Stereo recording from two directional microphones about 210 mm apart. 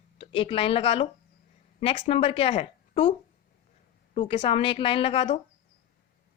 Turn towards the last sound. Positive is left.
turn(degrees=30)  # may be behind; listen again after turning